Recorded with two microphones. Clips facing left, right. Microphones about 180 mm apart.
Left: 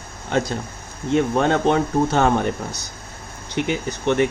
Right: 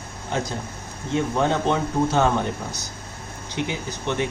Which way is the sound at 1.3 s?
65° left (ahead or behind).